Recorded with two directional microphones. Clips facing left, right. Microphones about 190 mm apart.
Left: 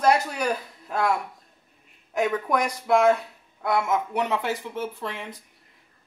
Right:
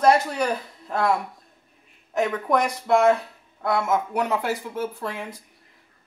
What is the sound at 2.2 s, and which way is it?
A man's voice, 5° left (ahead or behind).